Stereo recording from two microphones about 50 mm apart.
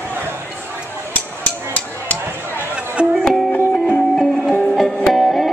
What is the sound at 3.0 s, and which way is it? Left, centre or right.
Music, centre.